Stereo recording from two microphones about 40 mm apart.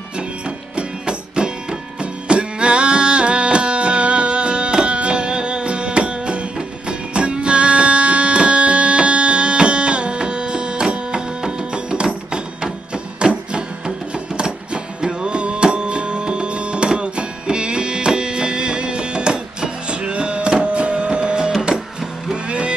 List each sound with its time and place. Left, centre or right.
0.7 s music: right